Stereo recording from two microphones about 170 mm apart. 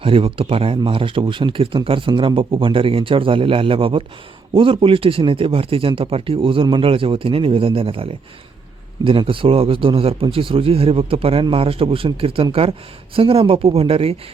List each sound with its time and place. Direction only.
0.0 s speech: 30° right (ahead or behind)